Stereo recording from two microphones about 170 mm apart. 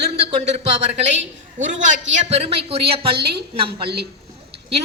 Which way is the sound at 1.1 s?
90° right.